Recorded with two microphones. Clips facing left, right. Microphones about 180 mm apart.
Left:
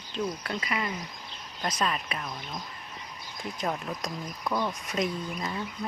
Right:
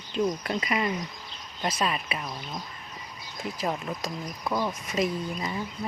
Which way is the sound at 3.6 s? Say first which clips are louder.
Right 1 dB; centre (ahead or behind).